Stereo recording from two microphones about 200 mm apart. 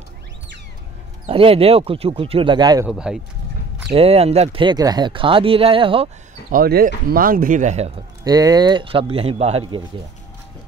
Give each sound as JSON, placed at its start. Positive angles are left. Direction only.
{"t": 1.2, "sound": "speech", "side_deg": -30}
{"t": 2.9, "sound": "speech", "side_deg": -5}
{"t": 3.9, "sound": "speech", "side_deg": -30}
{"t": 6.5, "sound": "speech", "side_deg": -45}
{"t": 8.2, "sound": "speech", "side_deg": -20}